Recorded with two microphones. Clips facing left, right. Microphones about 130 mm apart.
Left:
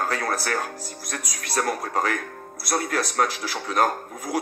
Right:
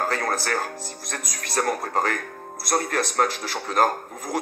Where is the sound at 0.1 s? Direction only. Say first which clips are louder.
Right 1 dB; 45° right (ahead or behind).